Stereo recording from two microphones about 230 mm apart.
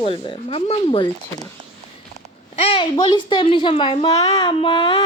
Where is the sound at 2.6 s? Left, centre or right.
Left.